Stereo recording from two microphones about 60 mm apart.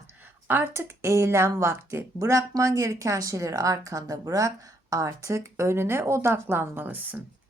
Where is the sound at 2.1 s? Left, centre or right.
Right.